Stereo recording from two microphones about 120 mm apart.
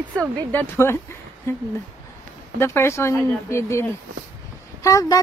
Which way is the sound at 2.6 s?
20° left (ahead or behind).